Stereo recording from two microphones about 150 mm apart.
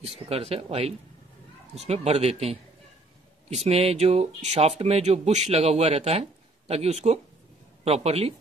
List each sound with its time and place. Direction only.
0.3 s speech: 45° right (ahead or behind)